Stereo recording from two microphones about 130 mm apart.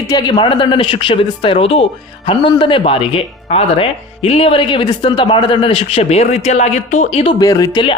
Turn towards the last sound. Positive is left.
turn(degrees=30)  # may be behind; listen again after turning